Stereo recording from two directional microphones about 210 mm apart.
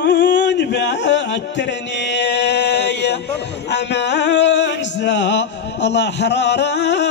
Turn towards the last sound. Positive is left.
turn(degrees=55)  # may be behind; listen again after turning